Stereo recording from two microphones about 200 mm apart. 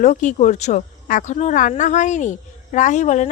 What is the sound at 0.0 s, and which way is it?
A woman's voice, 40° left (ahead or behind).